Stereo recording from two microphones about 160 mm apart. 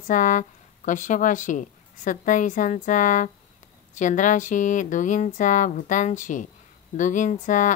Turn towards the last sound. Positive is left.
turn(degrees=50)  # may be behind; listen again after turning